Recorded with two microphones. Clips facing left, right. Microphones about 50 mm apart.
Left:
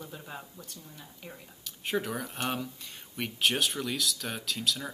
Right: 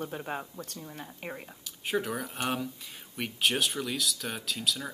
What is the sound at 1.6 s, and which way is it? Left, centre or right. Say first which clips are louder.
Speech: right 1 dB; centre.